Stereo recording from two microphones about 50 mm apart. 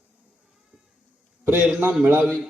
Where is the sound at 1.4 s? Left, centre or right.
Right.